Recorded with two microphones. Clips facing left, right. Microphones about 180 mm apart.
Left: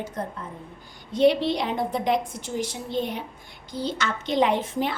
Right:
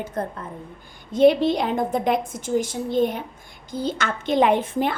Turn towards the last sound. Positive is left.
turn(degrees=-55)  # may be behind; listen again after turning